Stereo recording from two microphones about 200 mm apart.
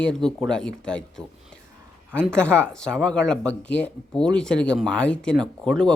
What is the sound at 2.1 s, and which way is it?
Speech, 5° left (ahead or behind).